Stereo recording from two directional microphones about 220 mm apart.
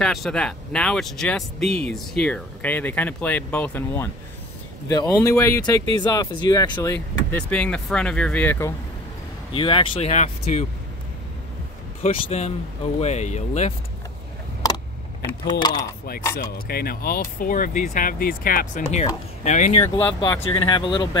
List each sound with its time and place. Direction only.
0.0 s speech: centre (ahead or behind)
9.5 s speech: 25° left (ahead or behind)
12.0 s speech: 30° left (ahead or behind)
15.6 s speech: 20° left (ahead or behind)
16.3 s speech: 45° left (ahead or behind)
19.8 s speech: 15° left (ahead or behind)